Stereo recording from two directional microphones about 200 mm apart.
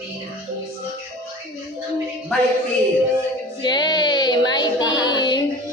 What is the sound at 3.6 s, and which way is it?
Child singing, 20° left (ahead or behind).